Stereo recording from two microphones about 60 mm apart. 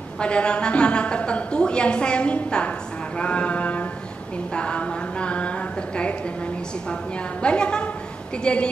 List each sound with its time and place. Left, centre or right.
0.2 s a woman's voice: centre